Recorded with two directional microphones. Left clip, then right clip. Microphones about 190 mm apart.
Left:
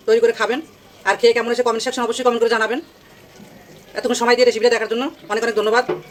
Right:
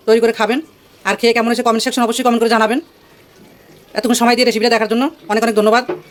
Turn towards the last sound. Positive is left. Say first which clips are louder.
# right 4 dB
turn(degrees=-55)  # may be behind; listen again after turning